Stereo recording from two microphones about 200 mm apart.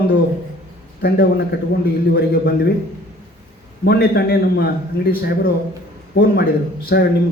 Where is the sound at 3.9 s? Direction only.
50° left (ahead or behind).